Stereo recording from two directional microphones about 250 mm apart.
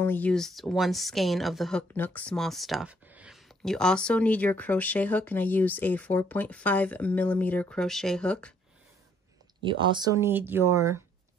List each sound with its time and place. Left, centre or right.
0.0 s speech: centre
9.6 s speech: centre